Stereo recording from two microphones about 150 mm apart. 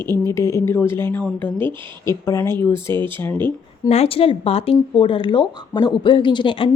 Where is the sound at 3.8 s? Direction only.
45° left (ahead or behind).